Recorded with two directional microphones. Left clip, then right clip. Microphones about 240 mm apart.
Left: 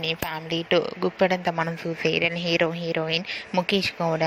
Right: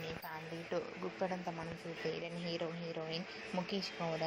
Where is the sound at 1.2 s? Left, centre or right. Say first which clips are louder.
Left 18 dB; left.